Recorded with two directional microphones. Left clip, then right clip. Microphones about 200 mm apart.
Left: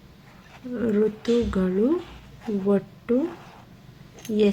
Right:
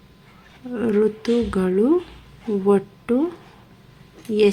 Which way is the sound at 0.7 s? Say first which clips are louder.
Right 4 dB; 20° right (ahead or behind).